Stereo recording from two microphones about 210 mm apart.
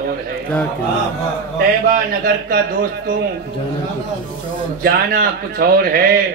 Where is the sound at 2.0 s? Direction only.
45° right (ahead or behind).